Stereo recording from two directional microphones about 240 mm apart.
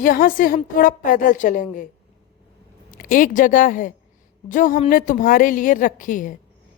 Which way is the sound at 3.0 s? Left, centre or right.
Left.